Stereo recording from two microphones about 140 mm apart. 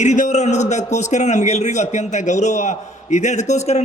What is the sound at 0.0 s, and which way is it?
A man's voice, 60° left (ahead or behind).